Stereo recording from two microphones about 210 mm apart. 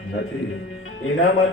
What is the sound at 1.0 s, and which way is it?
Speech, 70° left (ahead or behind).